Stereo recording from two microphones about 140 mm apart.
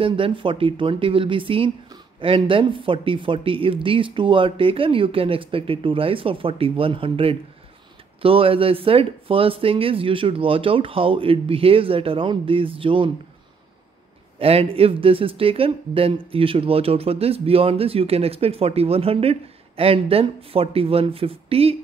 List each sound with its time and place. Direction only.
0.0 s speech: 40° right (ahead or behind)
14.4 s speech: 45° right (ahead or behind)